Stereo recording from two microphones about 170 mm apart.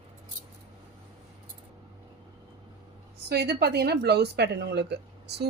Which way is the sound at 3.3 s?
70° right (ahead or behind).